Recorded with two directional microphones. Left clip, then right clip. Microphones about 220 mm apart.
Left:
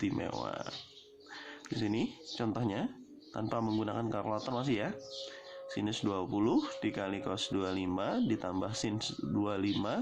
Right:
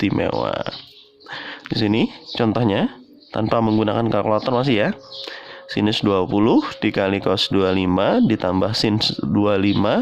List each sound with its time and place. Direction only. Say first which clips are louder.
0.0 s speech: right 16 dB; 40° right (ahead or behind)